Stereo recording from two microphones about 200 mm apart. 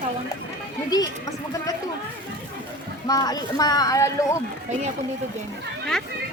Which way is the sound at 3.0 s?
20° left (ahead or behind).